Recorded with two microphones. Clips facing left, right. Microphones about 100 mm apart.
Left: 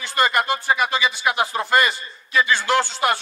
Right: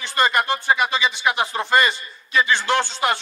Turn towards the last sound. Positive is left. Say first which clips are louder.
# left 1 dB
turn(degrees=-25)  # may be behind; listen again after turning